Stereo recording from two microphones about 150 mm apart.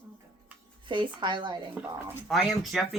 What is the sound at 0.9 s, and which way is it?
Speech, 30° right (ahead or behind).